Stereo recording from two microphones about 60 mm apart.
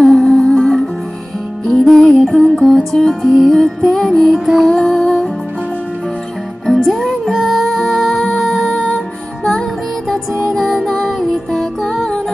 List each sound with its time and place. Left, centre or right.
0.0 s music: centre
4.3 s music: centre
4.6 s music: centre
6.8 s music: centre
8.7 s music: centre
10.4 s music: centre